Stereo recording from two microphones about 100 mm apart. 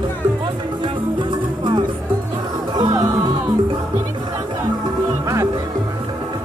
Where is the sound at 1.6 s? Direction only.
55° right (ahead or behind).